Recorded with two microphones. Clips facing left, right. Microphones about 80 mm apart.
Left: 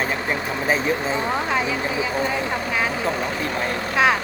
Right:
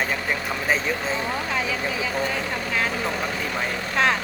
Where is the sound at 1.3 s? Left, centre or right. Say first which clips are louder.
Left 4 dB; left.